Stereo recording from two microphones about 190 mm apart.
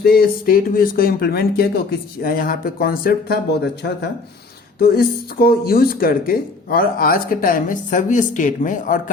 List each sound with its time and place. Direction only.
0.0 s speech: 55° left (ahead or behind)
4.8 s speech: 50° left (ahead or behind)